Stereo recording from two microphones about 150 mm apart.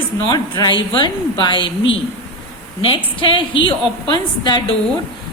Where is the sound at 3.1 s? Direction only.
35° left (ahead or behind).